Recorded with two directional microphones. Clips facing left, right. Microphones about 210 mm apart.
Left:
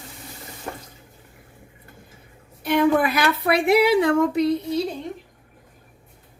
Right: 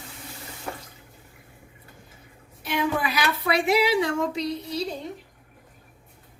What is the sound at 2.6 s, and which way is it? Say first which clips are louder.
A woman's voice: left 8 dB; 55° left (ahead or behind).